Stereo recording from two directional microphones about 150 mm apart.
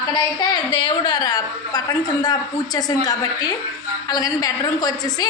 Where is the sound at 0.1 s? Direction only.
25° left (ahead or behind).